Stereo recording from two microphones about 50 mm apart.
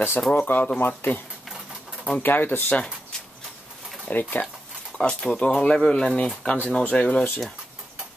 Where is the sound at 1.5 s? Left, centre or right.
Centre.